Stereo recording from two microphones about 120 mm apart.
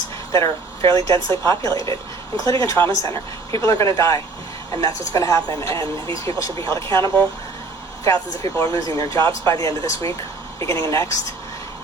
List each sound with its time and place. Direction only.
0.3 s speech: 25° left (ahead or behind)
8.0 s speech: 25° left (ahead or behind)